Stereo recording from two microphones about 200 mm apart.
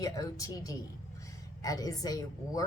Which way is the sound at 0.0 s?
15° left (ahead or behind).